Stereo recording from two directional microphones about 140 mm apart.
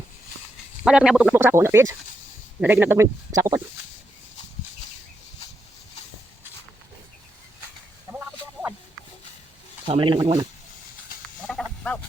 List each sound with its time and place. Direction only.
0.9 s a man's voice: 5° right (ahead or behind)
1.4 s a man's voice: 15° right (ahead or behind)
8.1 s a sound: 20° right (ahead or behind)
9.8 s speech: 35° right (ahead or behind)
11.4 s frog: 5° left (ahead or behind)